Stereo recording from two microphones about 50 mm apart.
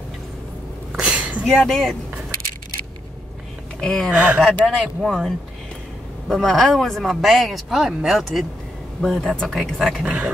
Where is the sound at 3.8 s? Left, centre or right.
Centre.